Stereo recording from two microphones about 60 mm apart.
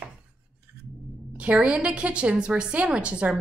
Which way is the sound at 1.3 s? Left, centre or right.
Right.